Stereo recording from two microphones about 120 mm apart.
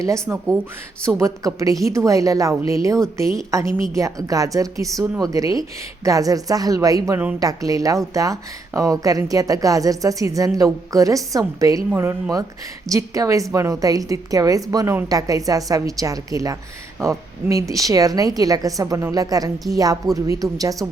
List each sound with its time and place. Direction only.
0.0 s speech: 25° right (ahead or behind)